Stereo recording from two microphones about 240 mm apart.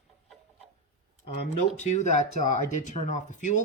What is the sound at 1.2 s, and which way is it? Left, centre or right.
Speech, left.